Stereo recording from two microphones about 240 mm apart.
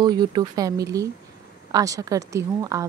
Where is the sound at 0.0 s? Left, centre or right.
Centre.